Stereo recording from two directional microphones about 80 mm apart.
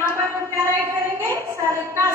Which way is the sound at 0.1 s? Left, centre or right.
Right.